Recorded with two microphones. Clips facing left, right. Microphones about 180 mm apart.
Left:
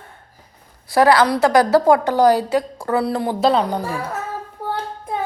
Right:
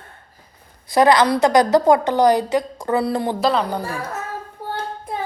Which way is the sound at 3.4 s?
25° left (ahead or behind).